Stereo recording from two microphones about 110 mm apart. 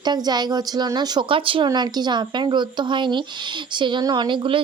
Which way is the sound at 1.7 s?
40° right (ahead or behind).